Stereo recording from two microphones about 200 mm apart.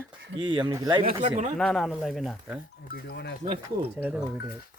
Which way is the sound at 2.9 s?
55° left (ahead or behind).